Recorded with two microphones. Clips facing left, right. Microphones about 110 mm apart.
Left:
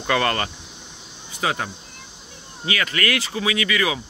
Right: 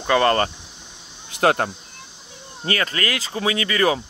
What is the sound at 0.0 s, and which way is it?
Speech, 30° right (ahead or behind).